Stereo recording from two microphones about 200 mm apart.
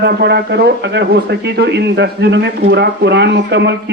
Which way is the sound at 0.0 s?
60° right (ahead or behind).